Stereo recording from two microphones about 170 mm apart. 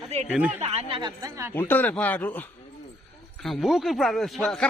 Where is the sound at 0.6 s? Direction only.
35° right (ahead or behind); by 1.5 s 20° right (ahead or behind).